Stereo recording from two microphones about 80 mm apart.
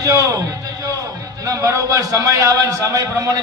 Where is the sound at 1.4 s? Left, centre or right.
Right.